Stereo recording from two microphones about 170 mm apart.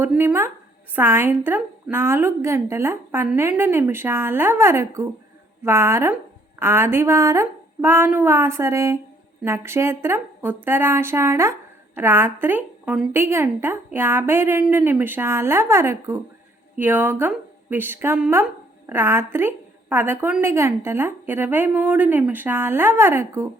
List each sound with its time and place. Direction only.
0.0 s a woman's voice: 10° right (ahead or behind)